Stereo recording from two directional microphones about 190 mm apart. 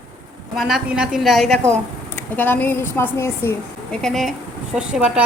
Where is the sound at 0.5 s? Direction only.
5° right (ahead or behind); by 3.5 s 10° left (ahead or behind).